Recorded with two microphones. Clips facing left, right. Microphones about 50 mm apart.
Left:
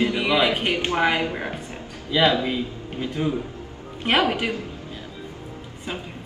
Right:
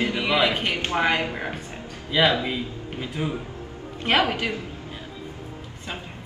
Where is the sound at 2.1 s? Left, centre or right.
Centre.